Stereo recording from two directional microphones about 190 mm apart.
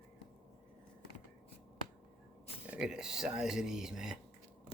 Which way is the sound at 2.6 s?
5° right (ahead or behind).